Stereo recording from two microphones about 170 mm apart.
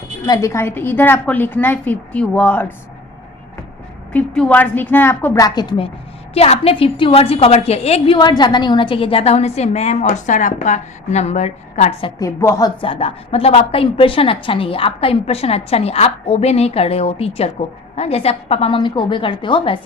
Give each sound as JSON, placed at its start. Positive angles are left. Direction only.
{"t": 0.3, "sound": "a woman's voice", "side_deg": 20}
{"t": 4.1, "sound": "a woman's voice", "side_deg": 10}
{"t": 12.2, "sound": "a woman's voice", "side_deg": 20}
{"t": 12.8, "sound": "a woman's voice", "side_deg": 30}